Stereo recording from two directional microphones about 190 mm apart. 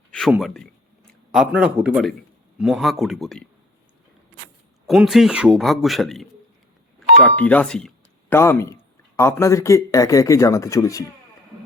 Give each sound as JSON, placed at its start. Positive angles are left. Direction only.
{"t": 0.1, "sound": "a man's voice", "side_deg": 0}
{"t": 4.9, "sound": "a man's voice", "side_deg": 0}
{"t": 7.3, "sound": "speech", "side_deg": 5}